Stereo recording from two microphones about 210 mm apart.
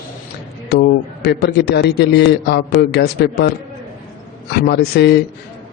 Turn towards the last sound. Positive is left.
turn(degrees=50)  # may be behind; listen again after turning